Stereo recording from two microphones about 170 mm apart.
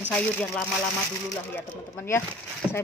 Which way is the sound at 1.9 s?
15° left (ahead or behind).